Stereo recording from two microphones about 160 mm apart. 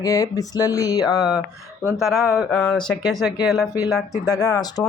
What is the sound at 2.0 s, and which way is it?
Speech, centre (ahead or behind).